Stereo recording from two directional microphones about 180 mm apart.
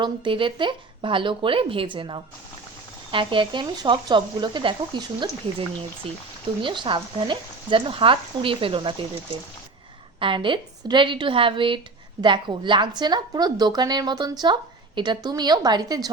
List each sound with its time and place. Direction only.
0.0 s speech: 30° right (ahead or behind)
10.2 s speech: 25° right (ahead or behind)